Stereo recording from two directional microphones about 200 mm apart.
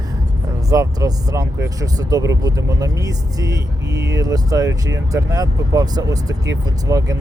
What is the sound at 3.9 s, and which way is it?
Speech, 55° right (ahead or behind).